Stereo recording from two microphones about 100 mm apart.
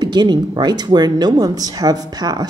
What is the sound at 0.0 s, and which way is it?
Speech, 45° right (ahead or behind).